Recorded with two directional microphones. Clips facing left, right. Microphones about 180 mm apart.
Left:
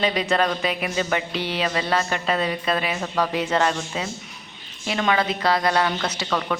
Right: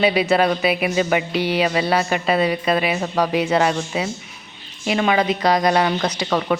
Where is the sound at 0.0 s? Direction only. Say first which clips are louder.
Right 5 dB; 10° right (ahead or behind).